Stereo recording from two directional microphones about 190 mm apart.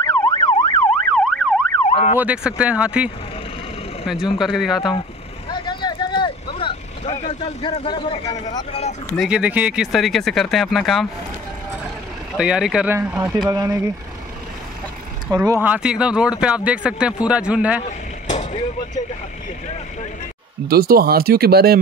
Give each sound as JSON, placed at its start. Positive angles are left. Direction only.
{"t": 0.0, "sound": "emergency vehicle", "side_deg": 20}
{"t": 1.1, "sound": "emergency vehicle", "side_deg": 0}
{"t": 1.9, "sound": "emergency vehicle", "side_deg": 30}
{"t": 2.1, "sound": "speech", "side_deg": -5}
{"t": 5.5, "sound": "vehicle", "side_deg": 25}
{"t": 9.1, "sound": "speech", "side_deg": -5}
{"t": 12.4, "sound": "speech", "side_deg": -5}
{"t": 15.3, "sound": "speech", "side_deg": -15}
{"t": 17.8, "sound": "a sound", "side_deg": 35}
{"t": 20.6, "sound": "speech", "side_deg": -55}